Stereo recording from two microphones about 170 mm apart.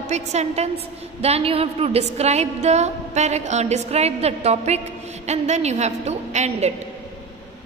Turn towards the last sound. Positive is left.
turn(degrees=-40)  # may be behind; listen again after turning